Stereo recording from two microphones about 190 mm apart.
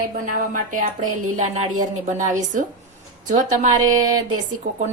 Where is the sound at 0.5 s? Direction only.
45° right (ahead or behind).